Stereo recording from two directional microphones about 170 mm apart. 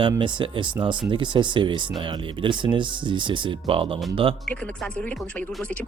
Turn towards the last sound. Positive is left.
turn(degrees=5)  # may be behind; listen again after turning